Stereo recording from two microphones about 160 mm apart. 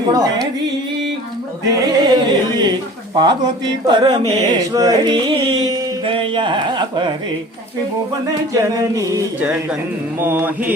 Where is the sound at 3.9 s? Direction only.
30° right (ahead or behind).